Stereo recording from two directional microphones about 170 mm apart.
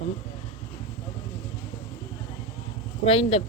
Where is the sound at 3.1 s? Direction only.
35° left (ahead or behind).